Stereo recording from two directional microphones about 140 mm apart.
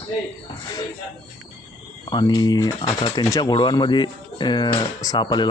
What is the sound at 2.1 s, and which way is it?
Speech, 30° left (ahead or behind).